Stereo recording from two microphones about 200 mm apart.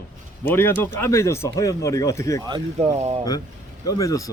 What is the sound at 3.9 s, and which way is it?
Speech, 15° left (ahead or behind).